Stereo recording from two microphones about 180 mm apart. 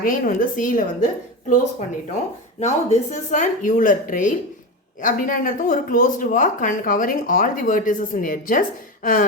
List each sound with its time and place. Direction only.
0.0 s speech: 50° left (ahead or behind)
2.6 s speech: 40° left (ahead or behind)